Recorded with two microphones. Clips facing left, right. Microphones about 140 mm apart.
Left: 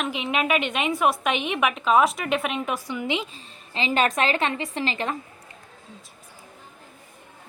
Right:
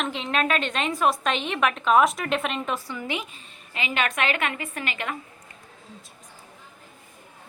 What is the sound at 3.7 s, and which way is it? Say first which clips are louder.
A woman's voice: left 4 dB; 35° left (ahead or behind).